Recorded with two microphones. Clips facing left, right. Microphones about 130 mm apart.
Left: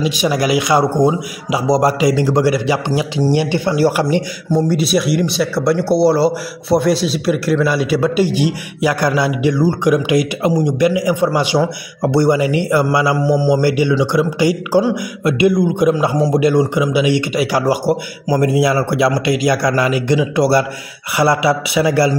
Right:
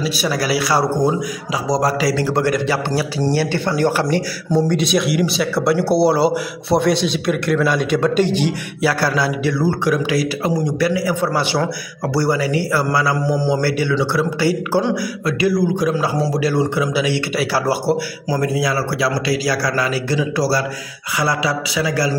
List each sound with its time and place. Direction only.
0.2 s speech: 20° left (ahead or behind)
4.6 s speech: 5° left (ahead or behind); by 22.1 s 25° left (ahead or behind)